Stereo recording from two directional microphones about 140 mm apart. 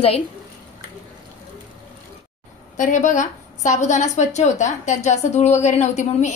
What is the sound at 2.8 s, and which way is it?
A woman's voice, 60° left (ahead or behind).